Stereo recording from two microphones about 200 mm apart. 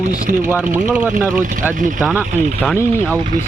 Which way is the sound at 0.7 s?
5° right (ahead or behind).